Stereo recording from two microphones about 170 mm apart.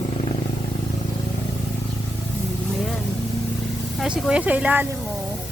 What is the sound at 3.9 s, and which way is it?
Speech, 5° right (ahead or behind).